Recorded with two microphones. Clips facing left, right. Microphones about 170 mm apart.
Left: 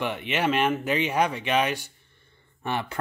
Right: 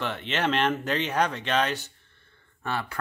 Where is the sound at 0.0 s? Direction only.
10° left (ahead or behind).